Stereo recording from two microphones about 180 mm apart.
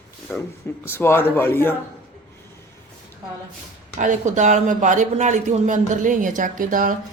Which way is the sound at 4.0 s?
45° right (ahead or behind).